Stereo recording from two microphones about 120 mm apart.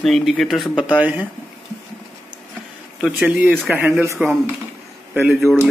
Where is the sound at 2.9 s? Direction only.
10° right (ahead or behind).